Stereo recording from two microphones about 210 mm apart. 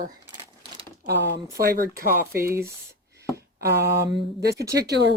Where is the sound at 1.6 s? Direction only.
45° right (ahead or behind).